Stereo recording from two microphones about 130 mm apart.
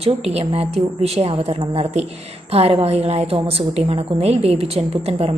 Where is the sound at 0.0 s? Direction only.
50° right (ahead or behind).